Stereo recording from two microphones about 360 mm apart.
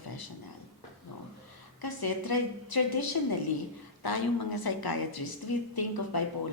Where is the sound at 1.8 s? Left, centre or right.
Left.